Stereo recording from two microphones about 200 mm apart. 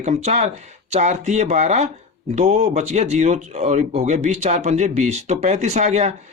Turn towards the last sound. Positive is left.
turn(degrees=-35)  # may be behind; listen again after turning